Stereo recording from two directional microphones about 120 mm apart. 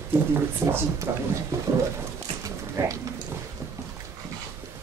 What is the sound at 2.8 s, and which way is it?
Speech, 20° right (ahead or behind).